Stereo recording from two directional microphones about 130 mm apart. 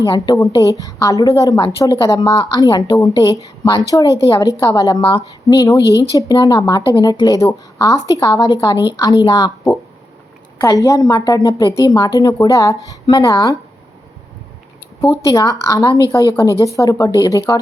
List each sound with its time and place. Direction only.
0.0 s a woman's voice: 35° left (ahead or behind)
15.1 s a woman's voice: 25° left (ahead or behind)